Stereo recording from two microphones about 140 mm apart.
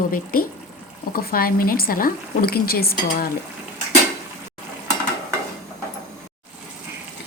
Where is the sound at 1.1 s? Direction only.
90° left.